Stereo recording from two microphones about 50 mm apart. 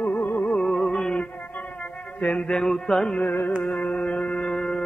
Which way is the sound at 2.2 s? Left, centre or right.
Centre.